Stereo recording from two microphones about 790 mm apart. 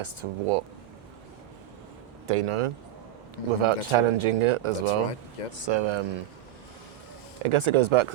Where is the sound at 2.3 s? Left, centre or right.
Right.